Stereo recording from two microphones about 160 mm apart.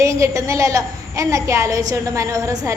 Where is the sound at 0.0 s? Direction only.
20° right (ahead or behind).